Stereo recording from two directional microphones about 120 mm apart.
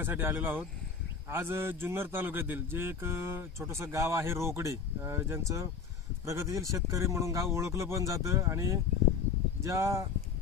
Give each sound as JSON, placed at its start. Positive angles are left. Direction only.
{"t": 0.0, "sound": "a man's voice", "side_deg": -20}